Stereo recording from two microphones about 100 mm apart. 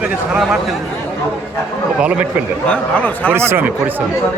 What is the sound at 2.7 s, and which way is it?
Speech, 15° left (ahead or behind).